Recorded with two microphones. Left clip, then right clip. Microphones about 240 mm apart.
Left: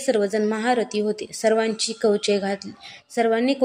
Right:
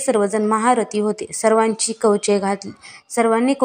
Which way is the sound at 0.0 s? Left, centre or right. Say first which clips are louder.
Right 3 dB; centre.